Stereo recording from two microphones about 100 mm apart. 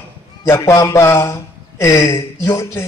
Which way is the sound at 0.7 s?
30° left (ahead or behind).